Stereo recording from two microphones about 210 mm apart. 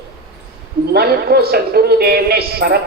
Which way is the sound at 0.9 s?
45° right (ahead or behind).